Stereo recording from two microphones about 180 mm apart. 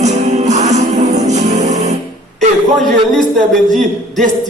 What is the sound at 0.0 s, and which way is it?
Music, 40° right (ahead or behind).